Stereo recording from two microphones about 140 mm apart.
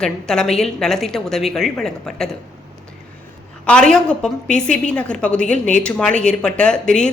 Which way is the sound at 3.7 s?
5° left (ahead or behind).